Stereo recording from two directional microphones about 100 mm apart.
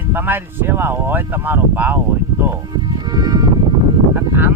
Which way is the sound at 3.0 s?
40° right (ahead or behind).